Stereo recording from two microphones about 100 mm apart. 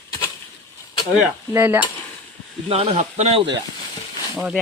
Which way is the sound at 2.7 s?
90° right.